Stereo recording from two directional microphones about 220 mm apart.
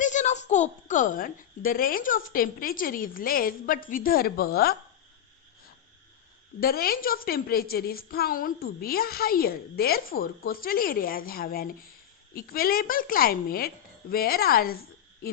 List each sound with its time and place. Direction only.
0.0 s a woman's voice: 35° left (ahead or behind)
6.6 s a woman's voice: 45° left (ahead or behind)